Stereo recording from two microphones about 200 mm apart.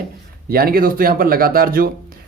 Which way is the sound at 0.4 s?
50° right (ahead or behind).